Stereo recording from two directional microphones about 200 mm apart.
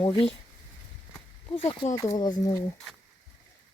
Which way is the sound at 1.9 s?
15° left (ahead or behind).